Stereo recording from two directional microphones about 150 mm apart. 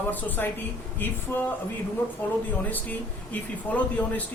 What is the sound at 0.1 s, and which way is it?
Speech, 10° left (ahead or behind).